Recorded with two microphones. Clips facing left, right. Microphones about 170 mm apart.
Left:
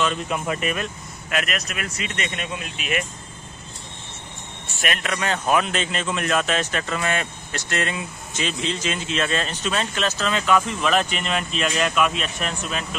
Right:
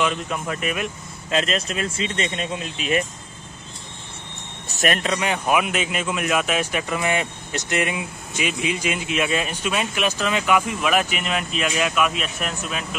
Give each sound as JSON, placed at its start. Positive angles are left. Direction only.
{"t": 0.3, "sound": "speech", "side_deg": 0}
{"t": 1.3, "sound": "speech", "side_deg": -30}
{"t": 4.6, "sound": "a sound", "side_deg": -40}
{"t": 5.0, "sound": "speech", "side_deg": -20}